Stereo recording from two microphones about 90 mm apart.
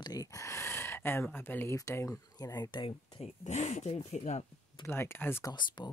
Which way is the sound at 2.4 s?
50° left (ahead or behind).